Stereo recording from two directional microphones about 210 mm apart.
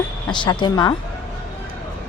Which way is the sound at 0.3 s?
20° left (ahead or behind).